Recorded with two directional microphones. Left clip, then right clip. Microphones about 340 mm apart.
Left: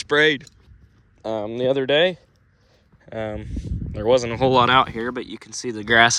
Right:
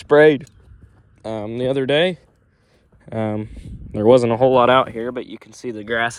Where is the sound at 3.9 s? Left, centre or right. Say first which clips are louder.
Right 6 dB; centre.